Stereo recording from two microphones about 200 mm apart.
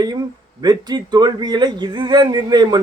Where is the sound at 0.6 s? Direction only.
20° right (ahead or behind).